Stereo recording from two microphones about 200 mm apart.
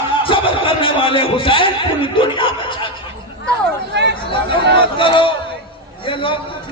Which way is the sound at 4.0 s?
60° right (ahead or behind).